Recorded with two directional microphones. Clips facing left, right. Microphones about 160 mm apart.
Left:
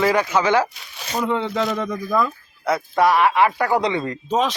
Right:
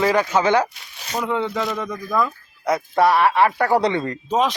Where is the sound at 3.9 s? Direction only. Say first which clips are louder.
Right 1 dB; 20° left (ahead or behind).